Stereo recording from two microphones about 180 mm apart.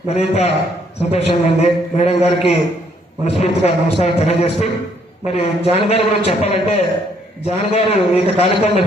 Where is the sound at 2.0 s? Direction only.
35° left (ahead or behind).